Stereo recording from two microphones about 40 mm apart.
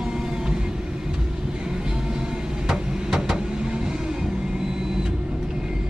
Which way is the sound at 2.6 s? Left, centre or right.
Centre.